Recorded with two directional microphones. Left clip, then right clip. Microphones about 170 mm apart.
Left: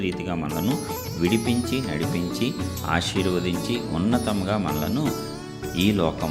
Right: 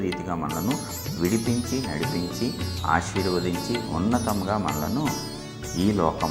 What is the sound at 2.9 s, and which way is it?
Speech, 50° left (ahead or behind).